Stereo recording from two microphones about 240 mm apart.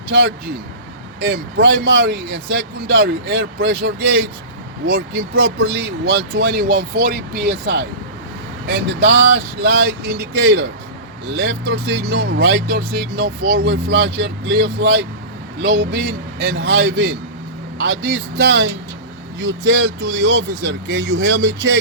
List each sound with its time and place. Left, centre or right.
0.1 s speech: right
1.5 s speech: right